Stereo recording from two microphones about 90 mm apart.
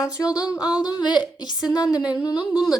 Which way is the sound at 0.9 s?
55° left (ahead or behind).